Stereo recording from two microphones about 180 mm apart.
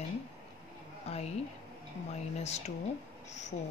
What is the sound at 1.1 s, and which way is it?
Speech, 35° left (ahead or behind).